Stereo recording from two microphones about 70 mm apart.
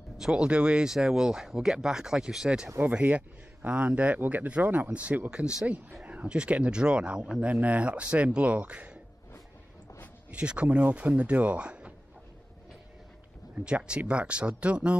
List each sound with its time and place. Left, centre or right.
0.2 s speech: centre
5.3 s speech: centre
10.3 s speech: centre
13.7 s speech: centre